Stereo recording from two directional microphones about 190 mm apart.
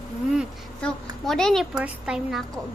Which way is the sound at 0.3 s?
5° left (ahead or behind).